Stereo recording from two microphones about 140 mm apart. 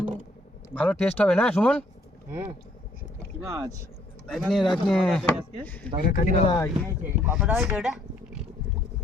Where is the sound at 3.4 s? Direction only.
20° right (ahead or behind).